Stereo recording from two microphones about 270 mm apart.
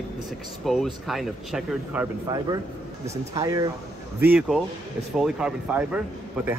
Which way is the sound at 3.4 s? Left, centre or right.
Centre.